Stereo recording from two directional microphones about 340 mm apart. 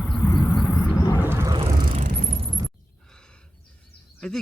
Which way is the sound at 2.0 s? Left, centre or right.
Centre.